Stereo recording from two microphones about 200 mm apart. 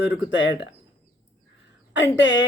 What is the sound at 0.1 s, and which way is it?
Speech, 65° left (ahead or behind).